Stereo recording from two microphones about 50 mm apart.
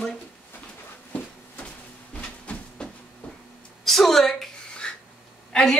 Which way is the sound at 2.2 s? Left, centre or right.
Left.